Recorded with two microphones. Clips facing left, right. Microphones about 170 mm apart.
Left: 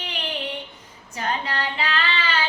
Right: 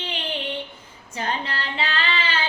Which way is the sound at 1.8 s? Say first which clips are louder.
Right 2 dB; 30° right (ahead or behind).